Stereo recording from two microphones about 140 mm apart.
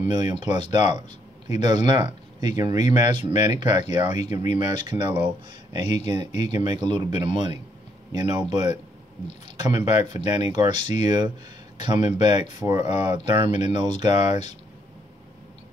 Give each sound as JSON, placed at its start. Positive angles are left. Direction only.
{"t": 0.0, "sound": "speech", "side_deg": -35}
{"t": 6.3, "sound": "speech", "side_deg": 50}
{"t": 6.6, "sound": "speech", "side_deg": -35}